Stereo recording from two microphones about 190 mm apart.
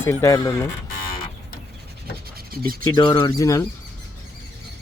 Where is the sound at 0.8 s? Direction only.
50° left (ahead or behind).